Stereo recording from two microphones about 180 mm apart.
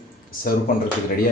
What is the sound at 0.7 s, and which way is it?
Speech, 55° left (ahead or behind).